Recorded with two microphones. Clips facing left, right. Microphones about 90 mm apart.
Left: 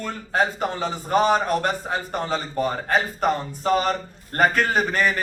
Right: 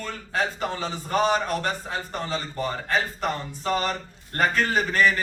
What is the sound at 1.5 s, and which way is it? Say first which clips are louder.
A man's voice: left 4 dB; 50° left (ahead or behind).